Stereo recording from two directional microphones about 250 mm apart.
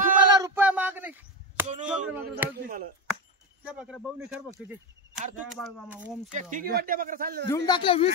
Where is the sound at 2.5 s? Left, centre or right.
Right.